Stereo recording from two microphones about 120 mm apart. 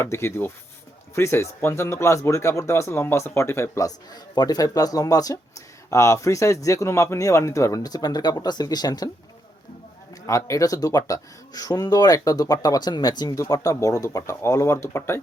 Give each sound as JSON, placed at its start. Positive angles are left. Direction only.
{"t": 0.0, "sound": "speech", "side_deg": 20}
{"t": 10.2, "sound": "speech", "side_deg": 25}